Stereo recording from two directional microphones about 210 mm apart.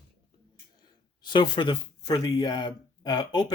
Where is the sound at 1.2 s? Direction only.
20° left (ahead or behind).